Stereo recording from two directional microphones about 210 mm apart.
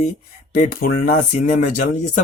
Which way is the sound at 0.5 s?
40° left (ahead or behind).